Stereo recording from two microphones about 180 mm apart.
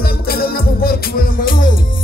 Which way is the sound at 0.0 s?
60° left (ahead or behind).